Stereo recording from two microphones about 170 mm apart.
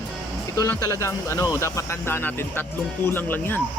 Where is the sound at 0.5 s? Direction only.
15° left (ahead or behind).